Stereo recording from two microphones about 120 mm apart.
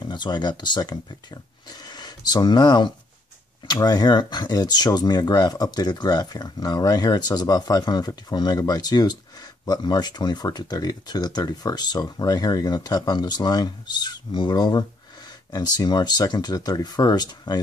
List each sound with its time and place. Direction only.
0.0 s speech: 40° left (ahead or behind)